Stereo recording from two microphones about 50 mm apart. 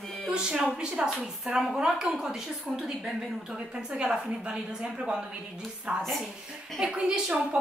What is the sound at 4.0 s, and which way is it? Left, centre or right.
A woman's voice, centre.